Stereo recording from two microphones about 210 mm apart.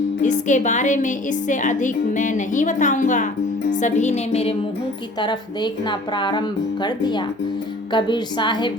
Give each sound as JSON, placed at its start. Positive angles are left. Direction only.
{"t": 0.2, "sound": "a woman's voice", "side_deg": 35}